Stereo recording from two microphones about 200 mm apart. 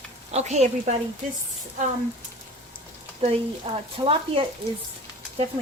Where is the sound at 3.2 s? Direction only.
30° right (ahead or behind).